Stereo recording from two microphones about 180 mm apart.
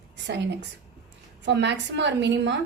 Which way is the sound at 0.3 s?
75° right (ahead or behind).